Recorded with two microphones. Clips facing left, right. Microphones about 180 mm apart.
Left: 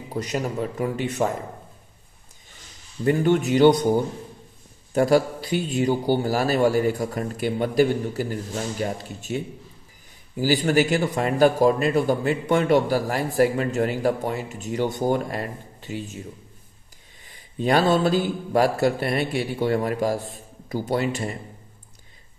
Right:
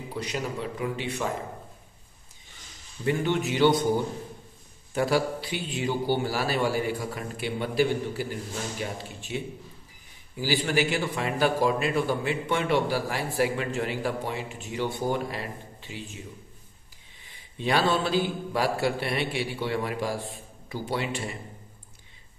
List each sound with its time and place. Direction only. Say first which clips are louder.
0.1 s a man's voice: left 6 dB; 45° left (ahead or behind)
3.1 s a man's voice: left 6 dB; 45° left (ahead or behind)
4.9 s a man's voice: left 6 dB; 45° left (ahead or behind)
17.3 s a man's voice: left 5 dB; 45° left (ahead or behind)